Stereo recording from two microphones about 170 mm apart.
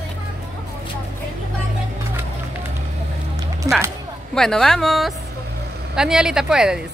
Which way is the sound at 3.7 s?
20° right (ahead or behind).